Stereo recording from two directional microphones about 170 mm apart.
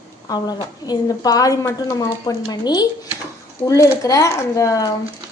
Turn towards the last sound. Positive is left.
turn(degrees=20)  # may be behind; listen again after turning